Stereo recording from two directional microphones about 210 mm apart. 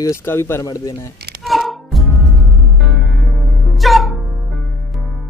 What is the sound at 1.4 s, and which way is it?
Music, centre (ahead or behind).